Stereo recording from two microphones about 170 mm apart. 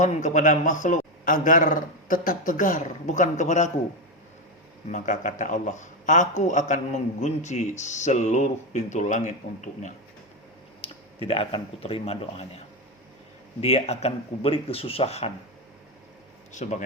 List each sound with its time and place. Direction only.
0.0 s a man's voice: 45° left (ahead or behind)
4.9 s a man's voice: 45° left (ahead or behind)
10.8 s speech: 35° left (ahead or behind)
16.5 s a man's voice: 45° left (ahead or behind)